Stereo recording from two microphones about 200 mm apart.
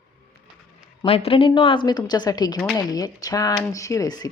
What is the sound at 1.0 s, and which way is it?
A woman's voice, 30° left (ahead or behind).